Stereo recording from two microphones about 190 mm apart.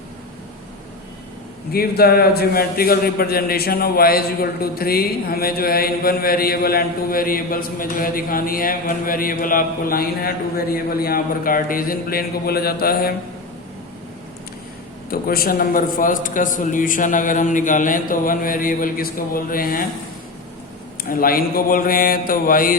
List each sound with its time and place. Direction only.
1.7 s a man's voice: 55° left (ahead or behind)
15.1 s a man's voice: 50° left (ahead or behind)
21.0 s a man's voice: 50° left (ahead or behind)